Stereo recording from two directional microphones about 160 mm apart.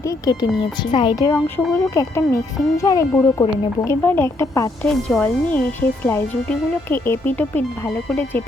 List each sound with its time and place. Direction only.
0.3 s speech: 30° left (ahead or behind)
1.5 s speech: 15° left (ahead or behind)
4.8 s speech: 5° left (ahead or behind)